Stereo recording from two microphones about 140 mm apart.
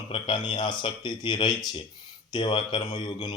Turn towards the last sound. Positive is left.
turn(degrees=35)  # may be behind; listen again after turning